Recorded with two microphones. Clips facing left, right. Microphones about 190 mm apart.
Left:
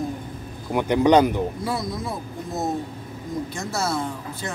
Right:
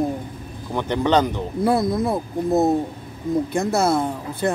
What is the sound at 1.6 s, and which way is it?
Speech, 55° right (ahead or behind).